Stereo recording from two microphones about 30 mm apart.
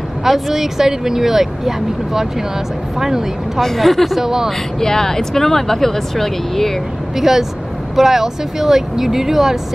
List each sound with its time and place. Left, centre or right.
0.2 s speech: centre
3.6 s speech: centre
4.1 s speech: centre
4.7 s speech: centre
7.2 s speech: centre